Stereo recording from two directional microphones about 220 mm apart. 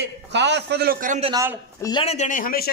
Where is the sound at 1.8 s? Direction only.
25° left (ahead or behind); by 2.7 s 40° left (ahead or behind).